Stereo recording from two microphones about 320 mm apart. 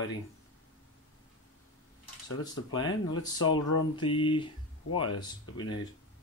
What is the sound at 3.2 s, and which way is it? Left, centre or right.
Speech, centre.